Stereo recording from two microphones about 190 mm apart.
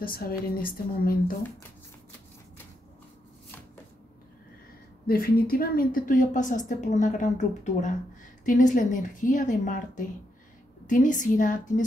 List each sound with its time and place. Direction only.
0.0 s a woman's voice: 50° left (ahead or behind)
5.0 s a woman's voice: 50° left (ahead or behind)